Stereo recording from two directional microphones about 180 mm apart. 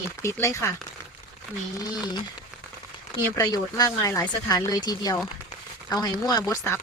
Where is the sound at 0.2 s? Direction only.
15° left (ahead or behind).